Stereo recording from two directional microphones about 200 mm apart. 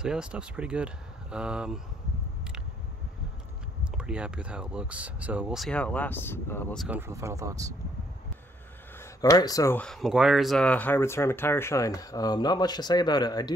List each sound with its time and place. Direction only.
0.0 s speech: 5° right (ahead or behind)
3.9 s speech: 5° right (ahead or behind)
6.9 s speech: 10° right (ahead or behind)
9.0 s speech: 15° left (ahead or behind)